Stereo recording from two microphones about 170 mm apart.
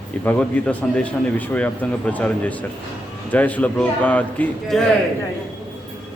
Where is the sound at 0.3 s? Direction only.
10° left (ahead or behind).